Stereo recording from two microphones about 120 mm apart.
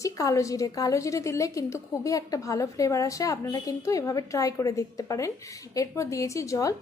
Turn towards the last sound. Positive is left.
turn(degrees=25)  # may be behind; listen again after turning